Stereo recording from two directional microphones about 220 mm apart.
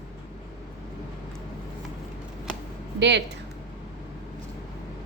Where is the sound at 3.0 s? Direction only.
50° right (ahead or behind).